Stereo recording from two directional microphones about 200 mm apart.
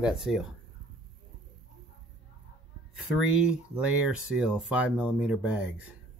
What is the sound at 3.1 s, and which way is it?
Speech, 5° right (ahead or behind).